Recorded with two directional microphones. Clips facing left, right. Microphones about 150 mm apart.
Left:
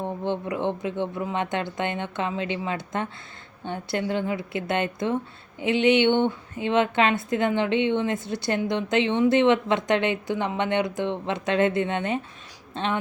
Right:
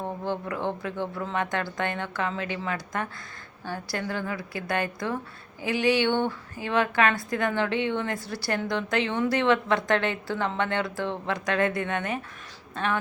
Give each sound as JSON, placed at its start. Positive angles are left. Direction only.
{"t": 0.0, "sound": "a woman's voice", "side_deg": 20}